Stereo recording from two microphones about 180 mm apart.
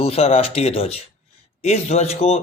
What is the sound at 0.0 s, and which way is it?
Speech, 35° left (ahead or behind).